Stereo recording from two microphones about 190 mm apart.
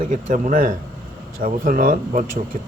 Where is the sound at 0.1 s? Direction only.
40° right (ahead or behind).